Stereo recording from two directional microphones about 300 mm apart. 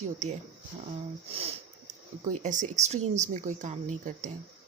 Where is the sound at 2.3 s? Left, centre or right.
Right.